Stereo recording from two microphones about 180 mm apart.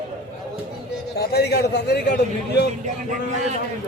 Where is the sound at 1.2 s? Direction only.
65° left (ahead or behind).